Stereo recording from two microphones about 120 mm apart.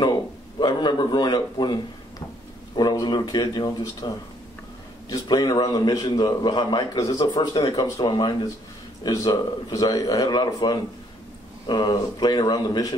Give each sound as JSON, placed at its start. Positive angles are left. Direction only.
{"t": 0.0, "sound": "a man's voice", "side_deg": 35}
{"t": 5.1, "sound": "a man's voice", "side_deg": 35}